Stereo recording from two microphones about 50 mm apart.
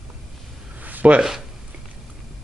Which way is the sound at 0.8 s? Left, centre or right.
Right.